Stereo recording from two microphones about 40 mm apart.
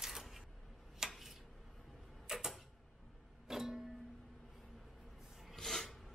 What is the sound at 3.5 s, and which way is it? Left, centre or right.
Music, centre.